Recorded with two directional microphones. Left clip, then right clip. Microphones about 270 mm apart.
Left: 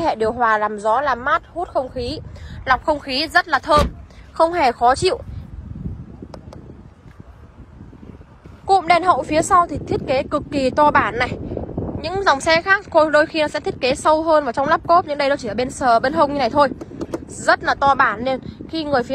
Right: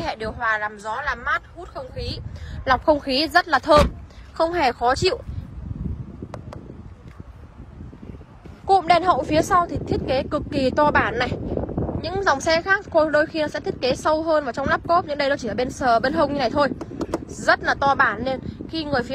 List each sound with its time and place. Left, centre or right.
0.0 s speech: centre
2.6 s a woman's voice: centre
8.6 s a woman's voice: centre